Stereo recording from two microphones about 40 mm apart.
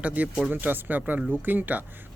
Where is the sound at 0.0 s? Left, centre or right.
Right.